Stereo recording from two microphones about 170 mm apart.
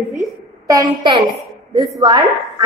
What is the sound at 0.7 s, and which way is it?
A woman's voice, 25° right (ahead or behind).